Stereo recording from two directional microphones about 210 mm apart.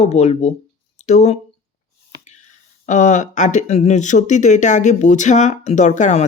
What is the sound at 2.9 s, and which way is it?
Speech, 35° left (ahead or behind).